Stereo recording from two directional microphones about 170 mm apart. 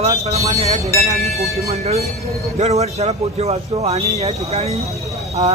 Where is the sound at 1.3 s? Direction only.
Centre (ahead or behind).